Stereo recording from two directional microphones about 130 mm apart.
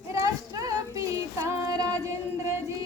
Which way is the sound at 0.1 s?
25° right (ahead or behind).